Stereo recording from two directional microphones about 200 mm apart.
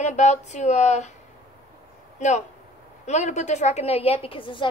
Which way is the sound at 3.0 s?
35° left (ahead or behind).